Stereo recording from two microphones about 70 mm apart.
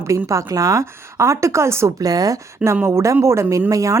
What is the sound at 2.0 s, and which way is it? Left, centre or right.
Speech, right.